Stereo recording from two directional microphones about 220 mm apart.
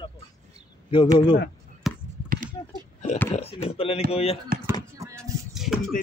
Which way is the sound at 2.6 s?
20° left (ahead or behind).